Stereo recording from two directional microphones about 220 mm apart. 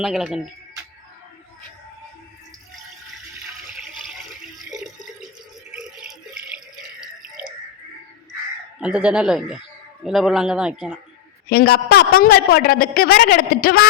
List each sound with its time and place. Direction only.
0.0 s a man's voice: 5° right (ahead or behind)
5.7 s a sound: 5° right (ahead or behind)
8.8 s a man's voice: 5° right (ahead or behind)
11.4 s a woman's voice: 45° left (ahead or behind)